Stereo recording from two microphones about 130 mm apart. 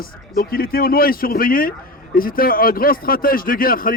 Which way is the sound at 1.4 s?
90° left.